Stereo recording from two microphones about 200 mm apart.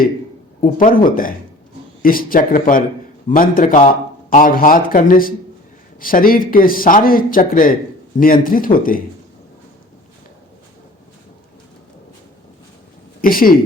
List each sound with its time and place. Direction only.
0.6 s a man's voice: 45° left (ahead or behind)
13.2 s a man's voice: 45° left (ahead or behind)